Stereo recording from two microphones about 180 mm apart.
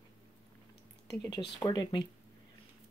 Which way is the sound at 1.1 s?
20° left (ahead or behind).